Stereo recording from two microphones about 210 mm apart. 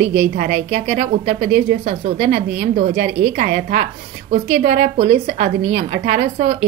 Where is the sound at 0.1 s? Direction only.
40° right (ahead or behind).